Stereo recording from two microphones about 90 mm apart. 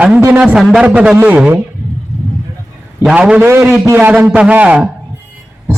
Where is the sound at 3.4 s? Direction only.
25° right (ahead or behind).